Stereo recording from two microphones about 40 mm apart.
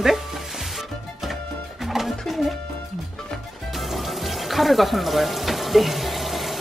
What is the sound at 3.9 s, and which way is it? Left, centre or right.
Music, centre.